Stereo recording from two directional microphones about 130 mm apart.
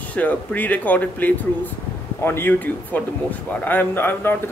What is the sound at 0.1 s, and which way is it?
Speech, 10° left (ahead or behind).